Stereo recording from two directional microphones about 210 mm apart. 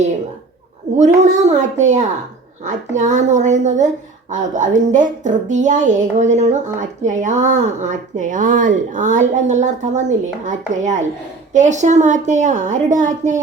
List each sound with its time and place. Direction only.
0.9 s speech: 35° right (ahead or behind)